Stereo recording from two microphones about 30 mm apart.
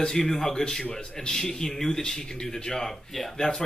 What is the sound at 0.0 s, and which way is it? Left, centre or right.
Speech, centre.